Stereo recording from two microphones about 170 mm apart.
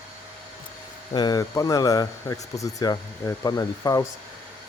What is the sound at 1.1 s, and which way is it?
Speech, 25° left (ahead or behind).